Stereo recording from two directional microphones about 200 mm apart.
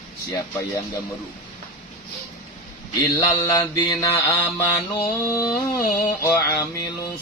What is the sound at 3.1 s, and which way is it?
Speech, 20° left (ahead or behind).